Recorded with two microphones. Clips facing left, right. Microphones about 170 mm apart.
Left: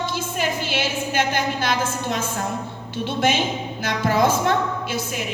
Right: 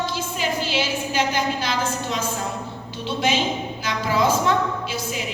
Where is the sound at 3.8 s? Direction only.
55° left (ahead or behind).